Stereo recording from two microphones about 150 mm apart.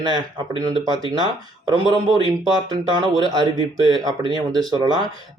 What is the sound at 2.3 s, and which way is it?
Speech, 25° right (ahead or behind).